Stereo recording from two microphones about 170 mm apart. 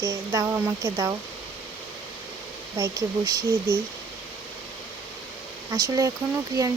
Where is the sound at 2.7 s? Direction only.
20° right (ahead or behind).